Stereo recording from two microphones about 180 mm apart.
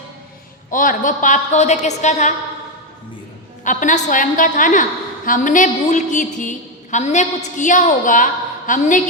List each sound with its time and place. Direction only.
0.7 s a woman's voice: 50° left (ahead or behind)
3.6 s a woman's voice: 45° left (ahead or behind)